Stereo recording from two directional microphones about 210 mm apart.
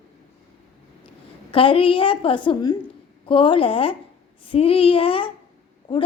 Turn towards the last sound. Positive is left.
turn(degrees=20)  # may be behind; listen again after turning